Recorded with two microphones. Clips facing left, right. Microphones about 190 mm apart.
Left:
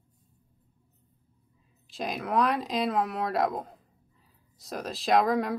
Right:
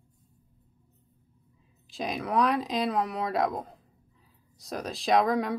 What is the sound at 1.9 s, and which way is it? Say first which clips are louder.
Speech: even; centre (ahead or behind).